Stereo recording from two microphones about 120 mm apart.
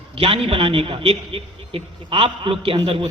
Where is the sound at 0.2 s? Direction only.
50° right (ahead or behind).